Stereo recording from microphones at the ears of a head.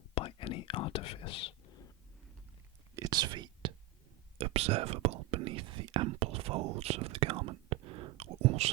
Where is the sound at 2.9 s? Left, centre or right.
Right.